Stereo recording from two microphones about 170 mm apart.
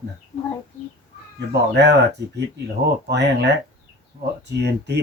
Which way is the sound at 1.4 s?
90° right.